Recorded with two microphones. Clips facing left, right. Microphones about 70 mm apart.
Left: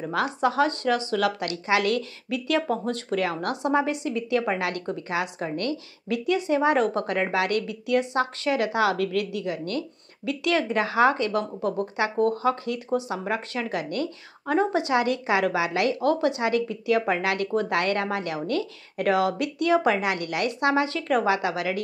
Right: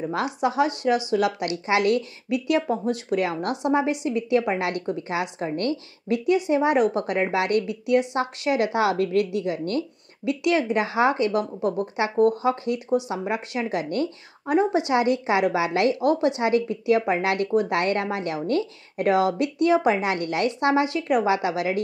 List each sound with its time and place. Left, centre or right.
0.1 s a woman's voice: centre
14.4 s a woman's voice: centre